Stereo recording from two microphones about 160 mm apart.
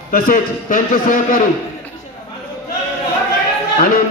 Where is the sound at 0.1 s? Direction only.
60° left (ahead or behind).